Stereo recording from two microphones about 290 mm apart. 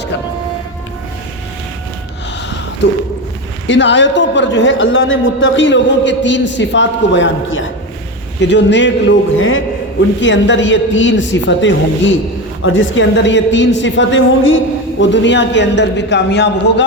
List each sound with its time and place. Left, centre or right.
3.7 s a woman's voice: left